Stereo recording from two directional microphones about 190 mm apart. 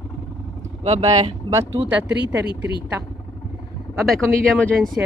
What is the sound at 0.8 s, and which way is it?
Speech, 35° right (ahead or behind).